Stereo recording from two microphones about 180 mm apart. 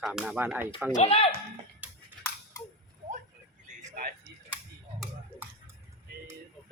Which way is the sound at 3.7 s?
55° right (ahead or behind).